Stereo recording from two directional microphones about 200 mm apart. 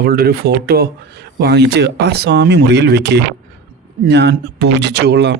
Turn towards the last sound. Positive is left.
turn(degrees=-55)  # may be behind; listen again after turning